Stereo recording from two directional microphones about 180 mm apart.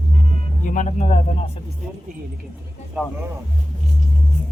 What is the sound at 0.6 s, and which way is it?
Speech, 45° left (ahead or behind).